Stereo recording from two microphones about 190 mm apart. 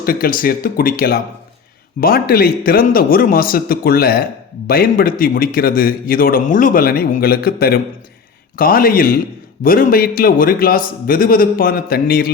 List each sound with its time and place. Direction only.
0.0 s a man's voice: 50° left (ahead or behind)